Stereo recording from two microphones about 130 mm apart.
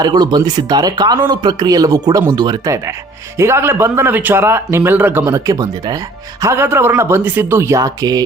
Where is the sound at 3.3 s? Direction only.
20° right (ahead or behind).